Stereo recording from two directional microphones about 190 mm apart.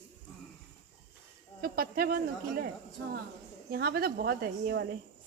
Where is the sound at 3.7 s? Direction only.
55° right (ahead or behind).